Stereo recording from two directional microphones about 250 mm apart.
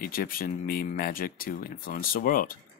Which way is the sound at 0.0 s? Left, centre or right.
Left.